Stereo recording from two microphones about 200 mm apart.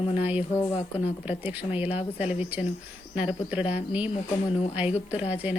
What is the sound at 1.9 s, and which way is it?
Speech, 30° left (ahead or behind).